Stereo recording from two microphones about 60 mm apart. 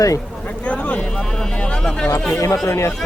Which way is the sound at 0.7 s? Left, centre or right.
Left.